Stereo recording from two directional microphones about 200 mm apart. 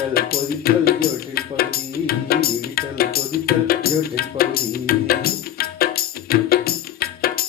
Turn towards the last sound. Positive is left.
turn(degrees=50)  # may be behind; listen again after turning